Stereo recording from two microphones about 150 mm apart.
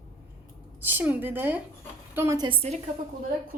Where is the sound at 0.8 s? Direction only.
10° right (ahead or behind).